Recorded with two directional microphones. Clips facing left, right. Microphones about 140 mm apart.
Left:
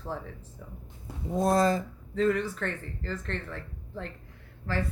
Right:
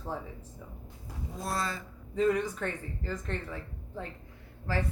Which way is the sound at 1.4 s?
40° left (ahead or behind).